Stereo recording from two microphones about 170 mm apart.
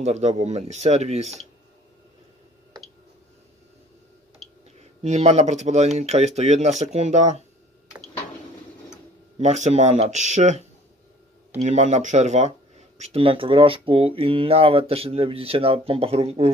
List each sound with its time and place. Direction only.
0.0 s speech: 40° right (ahead or behind)
4.7 s speech: 40° right (ahead or behind)
9.4 s speech: 40° right (ahead or behind)